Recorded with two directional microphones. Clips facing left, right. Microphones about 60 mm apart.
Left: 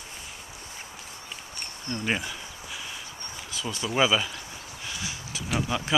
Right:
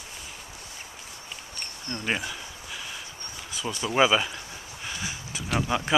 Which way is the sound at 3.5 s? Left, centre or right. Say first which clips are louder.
Right 1 dB; centre.